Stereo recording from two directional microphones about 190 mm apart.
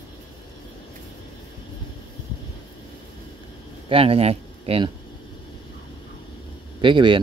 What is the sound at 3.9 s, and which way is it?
Speech, 30° right (ahead or behind).